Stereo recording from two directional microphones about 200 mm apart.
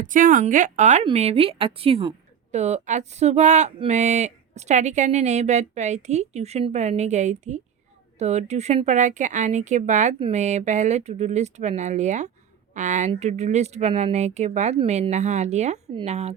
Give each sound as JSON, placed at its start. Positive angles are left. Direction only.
{"t": 0.0, "sound": "speech", "side_deg": -40}